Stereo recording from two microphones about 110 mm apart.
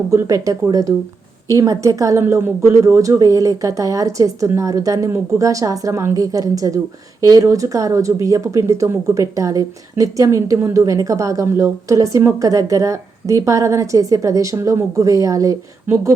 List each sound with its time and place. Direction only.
0.1 s a woman's voice: 30° right (ahead or behind)